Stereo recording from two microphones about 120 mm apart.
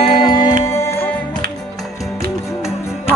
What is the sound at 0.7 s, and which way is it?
Music, 25° left (ahead or behind).